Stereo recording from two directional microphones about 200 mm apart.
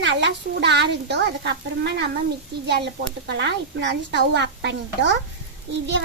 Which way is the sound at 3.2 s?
60° right (ahead or behind).